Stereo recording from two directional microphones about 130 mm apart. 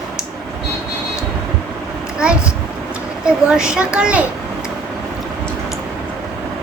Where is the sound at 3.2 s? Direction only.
5° right (ahead or behind).